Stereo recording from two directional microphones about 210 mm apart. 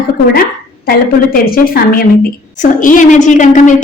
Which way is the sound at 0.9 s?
45° left (ahead or behind).